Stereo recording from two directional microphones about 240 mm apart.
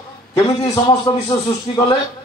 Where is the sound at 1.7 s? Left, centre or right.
Left.